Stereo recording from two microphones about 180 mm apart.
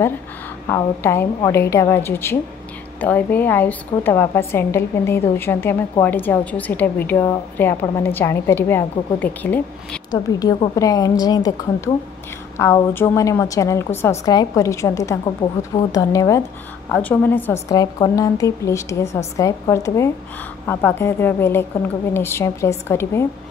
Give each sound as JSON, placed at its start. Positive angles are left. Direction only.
{"t": 0.7, "sound": "a woman's voice", "side_deg": 15}
{"t": 10.1, "sound": "a woman's voice", "side_deg": 20}